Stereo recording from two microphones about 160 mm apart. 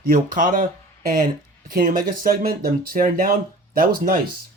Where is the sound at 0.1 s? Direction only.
60° right (ahead or behind).